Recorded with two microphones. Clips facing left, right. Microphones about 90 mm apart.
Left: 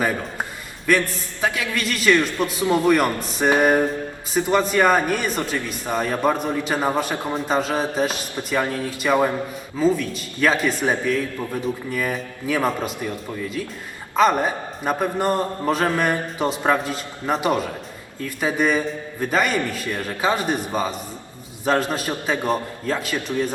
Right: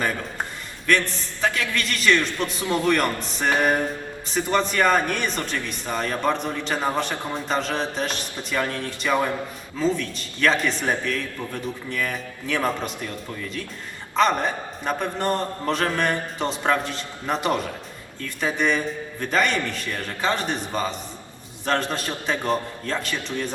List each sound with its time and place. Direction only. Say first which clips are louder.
0.9 s a man's voice: left 2 dB; 10° left (ahead or behind)